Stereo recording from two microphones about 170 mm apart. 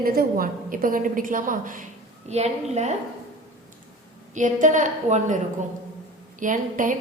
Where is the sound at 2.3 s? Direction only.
40° right (ahead or behind).